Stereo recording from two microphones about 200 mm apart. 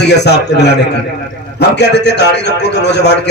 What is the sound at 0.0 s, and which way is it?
A man's voice, 55° left (ahead or behind).